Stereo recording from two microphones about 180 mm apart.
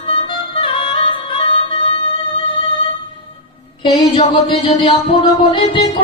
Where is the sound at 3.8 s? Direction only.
35° left (ahead or behind).